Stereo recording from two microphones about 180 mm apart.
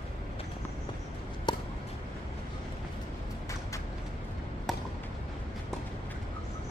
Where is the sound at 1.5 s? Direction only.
25° left (ahead or behind).